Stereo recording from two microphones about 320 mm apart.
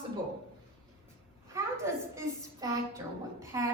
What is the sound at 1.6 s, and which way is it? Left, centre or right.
A woman's voice, centre.